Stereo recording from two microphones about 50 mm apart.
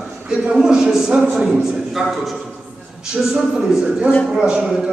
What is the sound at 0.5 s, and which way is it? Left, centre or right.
A man's voice, centre.